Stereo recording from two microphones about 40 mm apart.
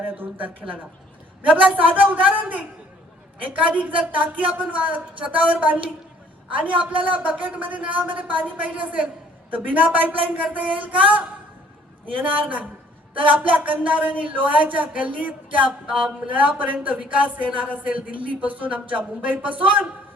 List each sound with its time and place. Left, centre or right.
0.0 s speech: right
1.7 s speech: right
12.2 s speech: right